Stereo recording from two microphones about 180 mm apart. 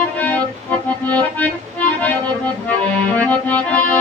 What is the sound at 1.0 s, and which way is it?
Accordion, 10° left (ahead or behind).